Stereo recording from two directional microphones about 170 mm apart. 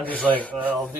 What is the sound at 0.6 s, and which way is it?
Speech, 10° right (ahead or behind).